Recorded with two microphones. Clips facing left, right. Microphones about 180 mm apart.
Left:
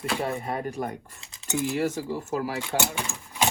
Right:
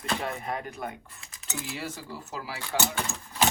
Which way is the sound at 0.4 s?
35° left (ahead or behind).